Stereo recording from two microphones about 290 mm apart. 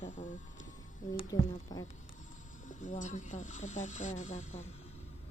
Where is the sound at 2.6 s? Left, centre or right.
Left.